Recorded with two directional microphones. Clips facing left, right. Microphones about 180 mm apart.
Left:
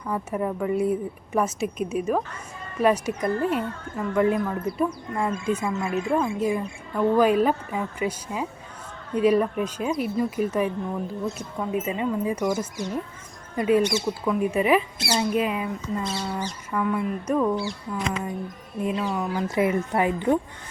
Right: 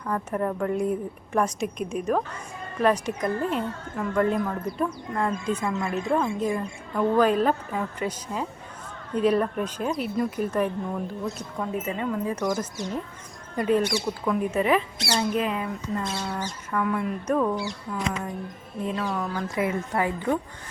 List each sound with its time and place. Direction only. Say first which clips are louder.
0.0 s speech: even; 10° left (ahead or behind)
13.8 s speech: left 2 dB; 20° left (ahead or behind)
14.3 s speech: left 2 dB; 5° left (ahead or behind)